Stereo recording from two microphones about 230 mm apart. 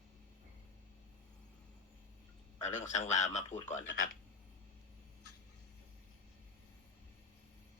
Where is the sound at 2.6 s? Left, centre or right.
Left.